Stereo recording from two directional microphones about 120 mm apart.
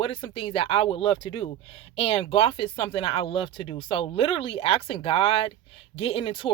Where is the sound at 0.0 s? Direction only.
50° left (ahead or behind).